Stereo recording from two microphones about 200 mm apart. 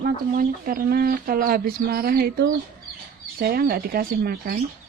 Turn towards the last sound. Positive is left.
turn(degrees=-50)  # may be behind; listen again after turning